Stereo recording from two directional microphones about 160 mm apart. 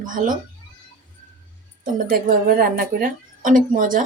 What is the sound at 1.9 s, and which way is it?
A woman's voice, 60° right (ahead or behind).